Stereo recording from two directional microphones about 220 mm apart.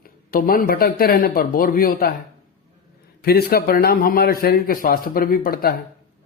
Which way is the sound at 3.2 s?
45° left (ahead or behind).